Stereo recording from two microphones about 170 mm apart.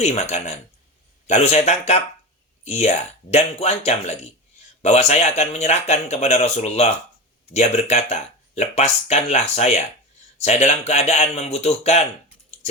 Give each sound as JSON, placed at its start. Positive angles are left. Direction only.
{"t": 0.0, "sound": "speech", "side_deg": 40}